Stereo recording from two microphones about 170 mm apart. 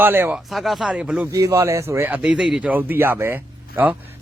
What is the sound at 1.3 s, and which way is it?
Speech, 15° right (ahead or behind).